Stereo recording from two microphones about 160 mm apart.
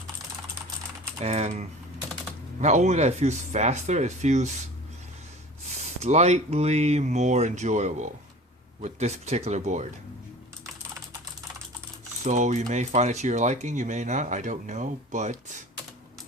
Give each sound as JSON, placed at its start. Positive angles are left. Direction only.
{"t": 1.2, "sound": "typing", "side_deg": -40}
{"t": 2.6, "sound": "speech", "side_deg": -45}
{"t": 6.0, "sound": "speech", "side_deg": -45}
{"t": 12.2, "sound": "speech", "side_deg": -45}